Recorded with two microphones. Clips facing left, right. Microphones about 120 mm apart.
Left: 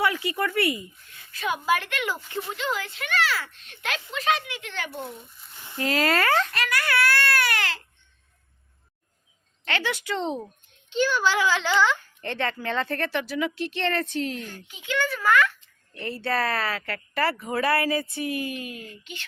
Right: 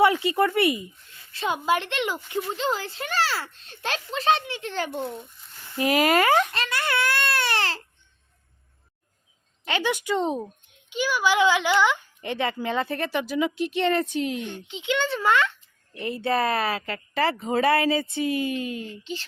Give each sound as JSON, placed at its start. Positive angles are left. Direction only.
{"t": 0.0, "sound": "speech", "side_deg": -25}
{"t": 2.5, "sound": "a child's voice", "side_deg": -35}
{"t": 5.7, "sound": "a child's voice", "side_deg": -15}
{"t": 6.5, "sound": "baby cry", "side_deg": -25}
{"t": 9.6, "sound": "a child's voice", "side_deg": -15}